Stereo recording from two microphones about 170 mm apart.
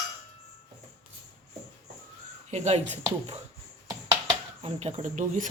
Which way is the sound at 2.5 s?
40° right (ahead or behind).